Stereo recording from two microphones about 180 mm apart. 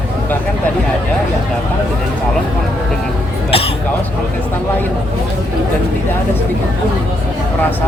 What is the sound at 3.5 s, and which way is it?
Cough, 30° left (ahead or behind).